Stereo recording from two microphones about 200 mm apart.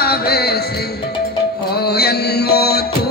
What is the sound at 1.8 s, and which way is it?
Music, 50° left (ahead or behind).